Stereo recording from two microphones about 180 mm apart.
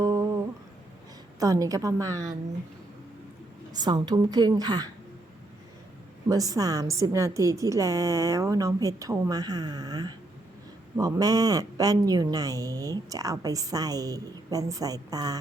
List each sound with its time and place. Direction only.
0.0 s humming: 15° right (ahead or behind)
1.4 s speech: 20° right (ahead or behind)
3.7 s speech: 20° right (ahead or behind)
6.2 s speech: 20° right (ahead or behind)